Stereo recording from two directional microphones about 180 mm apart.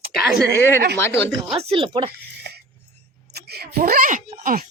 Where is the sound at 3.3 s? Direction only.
60° right (ahead or behind).